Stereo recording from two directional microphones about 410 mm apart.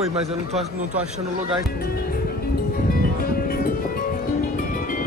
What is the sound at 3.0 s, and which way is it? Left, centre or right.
Music, left.